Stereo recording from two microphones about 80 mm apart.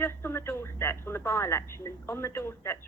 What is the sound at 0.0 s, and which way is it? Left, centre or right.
Speech, left.